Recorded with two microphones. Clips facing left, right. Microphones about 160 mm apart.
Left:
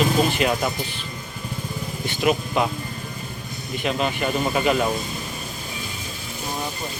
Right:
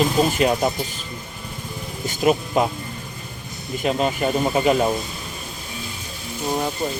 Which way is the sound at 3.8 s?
40° right (ahead or behind).